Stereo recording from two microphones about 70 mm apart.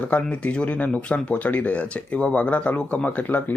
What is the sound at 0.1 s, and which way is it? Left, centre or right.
Speech, centre.